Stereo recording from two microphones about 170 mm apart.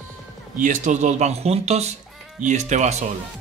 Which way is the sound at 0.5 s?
45° right (ahead or behind).